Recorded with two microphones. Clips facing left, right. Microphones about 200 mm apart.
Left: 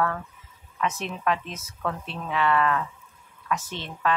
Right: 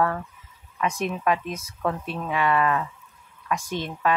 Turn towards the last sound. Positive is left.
turn(degrees=-15)  # may be behind; listen again after turning